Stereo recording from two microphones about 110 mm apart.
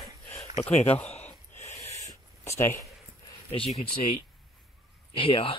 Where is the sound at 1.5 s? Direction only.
90° left.